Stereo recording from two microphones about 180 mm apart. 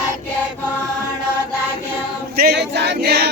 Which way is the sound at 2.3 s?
60° right (ahead or behind).